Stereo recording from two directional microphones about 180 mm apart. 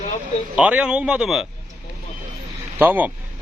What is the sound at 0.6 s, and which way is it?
Speech, 5° right (ahead or behind).